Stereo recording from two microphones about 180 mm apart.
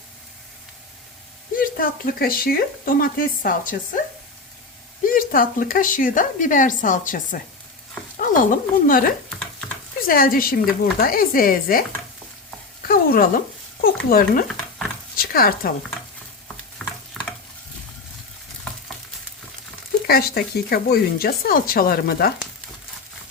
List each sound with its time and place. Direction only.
1.5 s speech: 50° left (ahead or behind)
5.0 s speech: 50° left (ahead or behind)
9.4 s stir: 5° left (ahead or behind)
10.1 s speech: 50° left (ahead or behind)
12.9 s speech: 50° left (ahead or behind)
14.4 s stir: centre (ahead or behind)
15.1 s a sound: 55° left (ahead or behind)
16.8 s stir: centre (ahead or behind)
20.1 s speech: 55° left (ahead or behind)